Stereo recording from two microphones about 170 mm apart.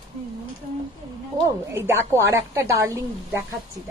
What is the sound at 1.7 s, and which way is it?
A woman's voice, 15° right (ahead or behind).